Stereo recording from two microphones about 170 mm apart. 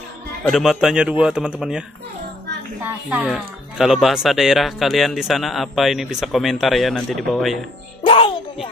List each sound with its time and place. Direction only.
0.4 s speech: centre (ahead or behind)
3.1 s speech: 10° right (ahead or behind)
8.0 s music: 30° left (ahead or behind)